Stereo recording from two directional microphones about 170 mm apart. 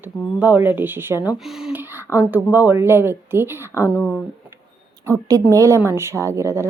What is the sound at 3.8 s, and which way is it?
Speech, 10° left (ahead or behind).